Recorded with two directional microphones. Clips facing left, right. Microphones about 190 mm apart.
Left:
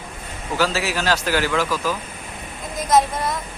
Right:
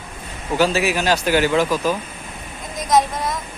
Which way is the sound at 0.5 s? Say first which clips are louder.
Right 4 dB; 20° right (ahead or behind).